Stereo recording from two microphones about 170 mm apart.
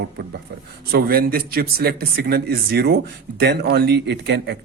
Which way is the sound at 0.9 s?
60° right (ahead or behind).